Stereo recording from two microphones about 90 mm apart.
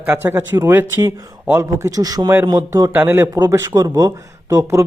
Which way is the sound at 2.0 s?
45° right (ahead or behind).